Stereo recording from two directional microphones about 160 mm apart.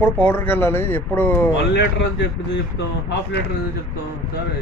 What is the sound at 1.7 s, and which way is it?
Speech, 90° left.